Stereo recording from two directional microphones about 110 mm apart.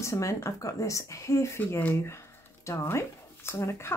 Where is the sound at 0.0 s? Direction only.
25° left (ahead or behind).